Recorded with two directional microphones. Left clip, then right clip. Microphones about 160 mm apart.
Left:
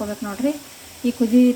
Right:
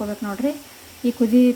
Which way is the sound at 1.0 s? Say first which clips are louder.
Even; 25° right (ahead or behind).